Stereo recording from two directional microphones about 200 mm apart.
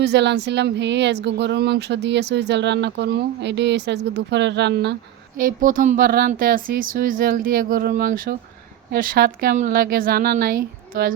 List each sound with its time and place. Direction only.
0.0 s speech: 60° right (ahead or behind)
5.4 s speech: 40° right (ahead or behind)